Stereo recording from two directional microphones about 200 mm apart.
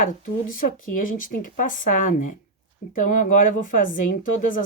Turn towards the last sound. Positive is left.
turn(degrees=40)  # may be behind; listen again after turning